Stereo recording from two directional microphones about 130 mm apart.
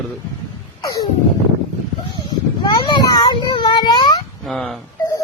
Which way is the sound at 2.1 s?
35° left (ahead or behind).